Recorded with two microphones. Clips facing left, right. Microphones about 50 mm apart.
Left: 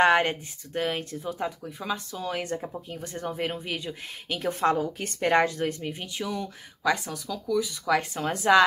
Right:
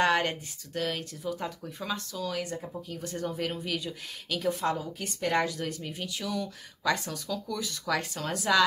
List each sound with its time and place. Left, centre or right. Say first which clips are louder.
0.0 s speech: left 5 dB; left
1.4 s speech: left 4 dB; centre
2.1 s speech: left 3 dB; left
4.6 s speech: left 6 dB; left
6.9 s speech: left 2 dB; centre
8.0 s speech: left 4 dB; left